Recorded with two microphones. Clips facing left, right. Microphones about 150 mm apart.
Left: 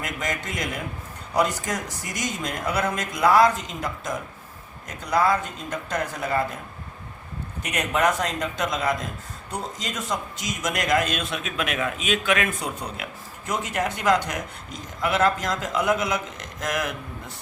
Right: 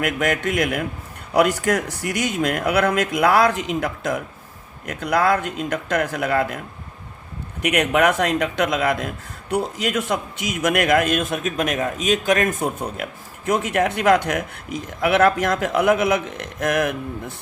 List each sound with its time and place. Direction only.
0.0 s a man's voice: 65° right (ahead or behind)
7.6 s a man's voice: 65° right (ahead or behind)